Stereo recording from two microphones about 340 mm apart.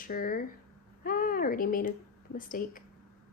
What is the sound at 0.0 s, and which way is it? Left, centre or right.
Speech, left.